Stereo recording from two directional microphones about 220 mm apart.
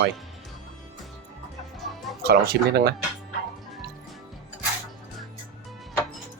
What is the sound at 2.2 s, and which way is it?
Speech, 45° right (ahead or behind).